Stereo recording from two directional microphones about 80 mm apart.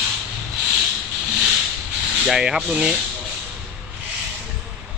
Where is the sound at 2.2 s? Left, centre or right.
Centre.